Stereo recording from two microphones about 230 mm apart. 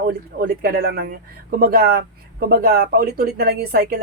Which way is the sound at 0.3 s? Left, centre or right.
Right.